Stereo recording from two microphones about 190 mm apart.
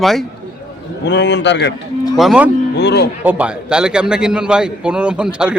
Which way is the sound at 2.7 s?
60° left (ahead or behind).